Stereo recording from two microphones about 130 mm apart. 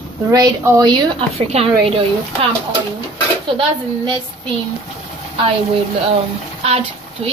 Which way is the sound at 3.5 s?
40° right (ahead or behind).